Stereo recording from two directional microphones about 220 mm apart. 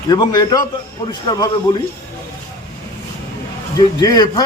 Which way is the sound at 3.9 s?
20° left (ahead or behind).